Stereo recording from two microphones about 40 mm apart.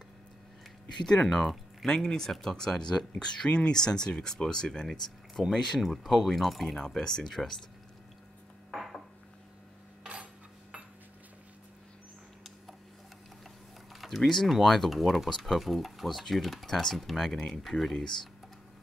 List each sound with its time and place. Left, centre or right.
1.0 s speech: centre
5.8 s speech: centre
6.7 s speech: centre
8.7 s dishes: centre
14.0 s a sound: centre
14.5 s speech: centre
15.2 s speech: centre
15.5 s speech: centre
17.3 s speech: centre